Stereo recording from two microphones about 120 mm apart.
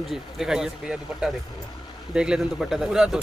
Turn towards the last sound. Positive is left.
turn(degrees=-5)  # may be behind; listen again after turning